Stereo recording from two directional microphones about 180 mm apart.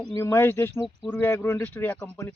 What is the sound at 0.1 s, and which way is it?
Speech, 15° left (ahead or behind).